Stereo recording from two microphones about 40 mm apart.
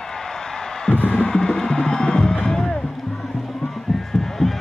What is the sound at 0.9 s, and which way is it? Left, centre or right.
Music, left.